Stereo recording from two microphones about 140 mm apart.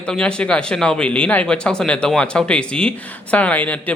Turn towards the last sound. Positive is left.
turn(degrees=10)  # may be behind; listen again after turning